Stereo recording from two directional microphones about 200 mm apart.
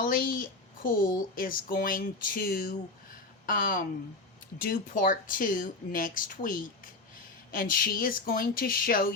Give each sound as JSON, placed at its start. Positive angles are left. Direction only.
{"t": 0.0, "sound": "a woman's voice", "side_deg": 45}